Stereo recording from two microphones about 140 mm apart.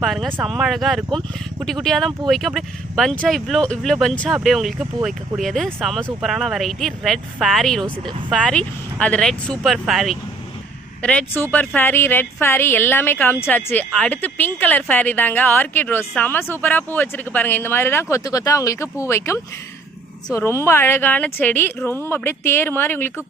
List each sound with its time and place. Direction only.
0.0 s speech: centre (ahead or behind)
11.0 s a woman's voice: 10° left (ahead or behind)